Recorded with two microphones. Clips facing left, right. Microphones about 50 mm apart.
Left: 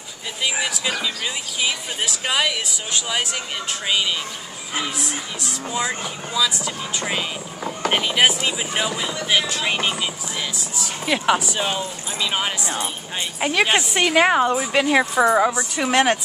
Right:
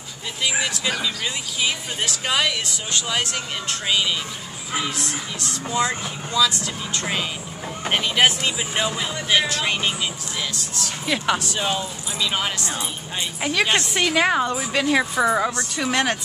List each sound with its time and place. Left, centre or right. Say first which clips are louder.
0.4 s speech: even; centre